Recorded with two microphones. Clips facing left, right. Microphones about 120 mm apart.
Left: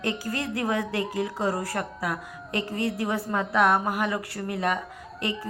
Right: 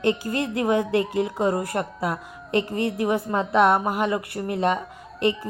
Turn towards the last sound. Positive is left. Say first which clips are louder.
# right 8 dB
turn(degrees=-25)  # may be behind; listen again after turning